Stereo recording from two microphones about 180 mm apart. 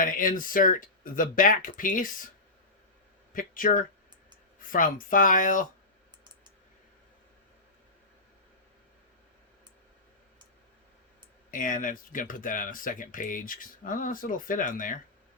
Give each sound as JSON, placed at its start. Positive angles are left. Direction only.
{"t": 0.0, "sound": "speech", "side_deg": 50}
{"t": 3.3, "sound": "speech", "side_deg": 50}
{"t": 11.5, "sound": "speech", "side_deg": 45}